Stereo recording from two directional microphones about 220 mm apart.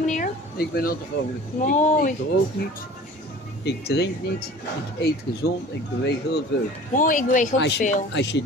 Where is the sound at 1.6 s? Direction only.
35° left (ahead or behind).